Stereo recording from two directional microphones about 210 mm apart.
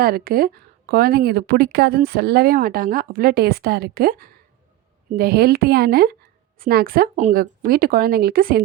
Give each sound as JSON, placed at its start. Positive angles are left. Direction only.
{"t": 0.0, "sound": "a woman's voice", "side_deg": -45}